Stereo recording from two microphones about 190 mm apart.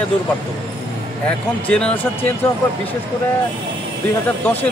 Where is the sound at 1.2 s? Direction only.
5° left (ahead or behind).